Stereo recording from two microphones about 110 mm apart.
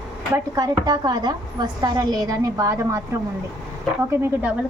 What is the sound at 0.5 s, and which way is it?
A woman's voice, 35° right (ahead or behind).